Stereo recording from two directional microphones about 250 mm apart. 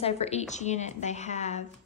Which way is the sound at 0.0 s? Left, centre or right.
Left.